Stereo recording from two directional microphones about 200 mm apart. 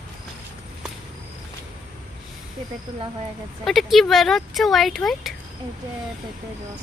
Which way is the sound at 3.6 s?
Centre (ahead or behind).